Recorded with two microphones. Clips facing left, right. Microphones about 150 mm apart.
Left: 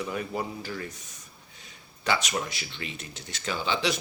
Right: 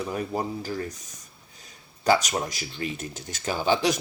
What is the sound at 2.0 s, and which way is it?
Speech, 40° right (ahead or behind).